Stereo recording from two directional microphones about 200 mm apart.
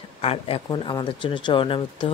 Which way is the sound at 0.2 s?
30° left (ahead or behind).